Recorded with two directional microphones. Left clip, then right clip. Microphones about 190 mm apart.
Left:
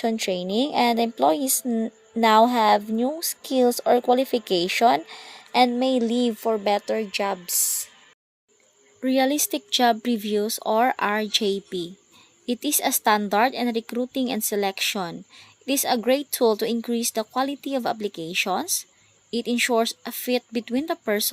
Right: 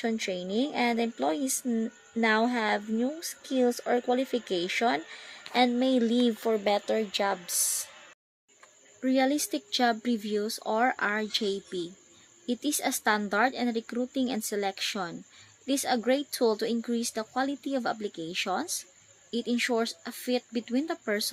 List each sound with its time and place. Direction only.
0.0 s speech: 35° left (ahead or behind)
9.0 s speech: 35° left (ahead or behind)